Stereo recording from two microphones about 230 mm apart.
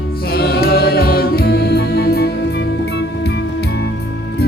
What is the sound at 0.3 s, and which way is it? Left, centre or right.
Music, left.